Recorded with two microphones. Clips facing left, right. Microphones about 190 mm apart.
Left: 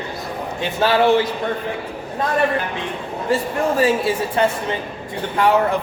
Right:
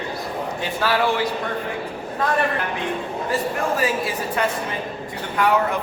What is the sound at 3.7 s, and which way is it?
A man's voice, 30° left (ahead or behind).